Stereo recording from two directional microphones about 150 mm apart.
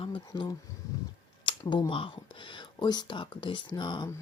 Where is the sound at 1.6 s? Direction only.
30° left (ahead or behind).